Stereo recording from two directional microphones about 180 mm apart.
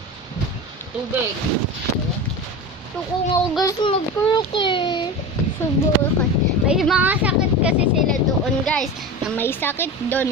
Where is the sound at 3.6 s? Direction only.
25° left (ahead or behind).